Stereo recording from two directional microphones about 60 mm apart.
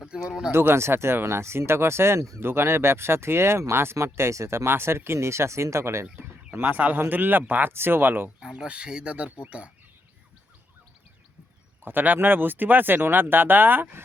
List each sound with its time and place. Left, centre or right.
0.1 s speech: centre
0.5 s speech: right
6.1 s a sound: right
7.1 s speech: right
8.4 s speech: centre
11.8 s speech: right